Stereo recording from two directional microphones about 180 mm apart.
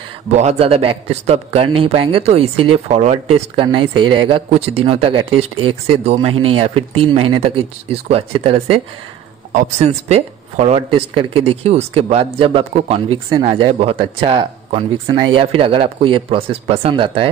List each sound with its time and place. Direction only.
0.3 s speech: 40° right (ahead or behind)